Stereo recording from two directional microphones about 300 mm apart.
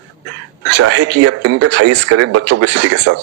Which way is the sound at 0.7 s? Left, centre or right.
Right.